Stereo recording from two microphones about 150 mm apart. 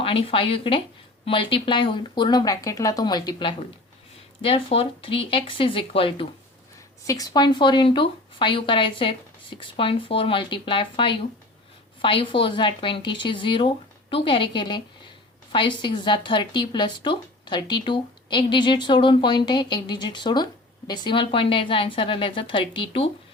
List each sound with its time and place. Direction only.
0.0 s a woman's voice: 35° left (ahead or behind)
7.1 s a woman's voice: 25° left (ahead or behind)